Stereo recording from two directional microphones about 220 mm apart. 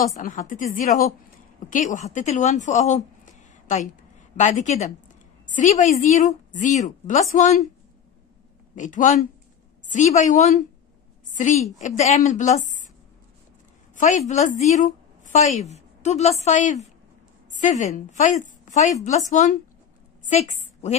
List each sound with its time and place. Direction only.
0.2 s a woman's voice: 35° left (ahead or behind)
8.7 s a woman's voice: 35° left (ahead or behind)
13.9 s a woman's voice: 35° left (ahead or behind)